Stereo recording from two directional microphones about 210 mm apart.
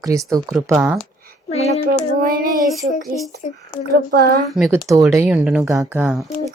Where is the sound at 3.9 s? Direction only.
50° right (ahead or behind).